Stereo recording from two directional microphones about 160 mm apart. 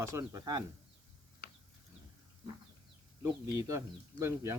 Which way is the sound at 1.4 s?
85° left.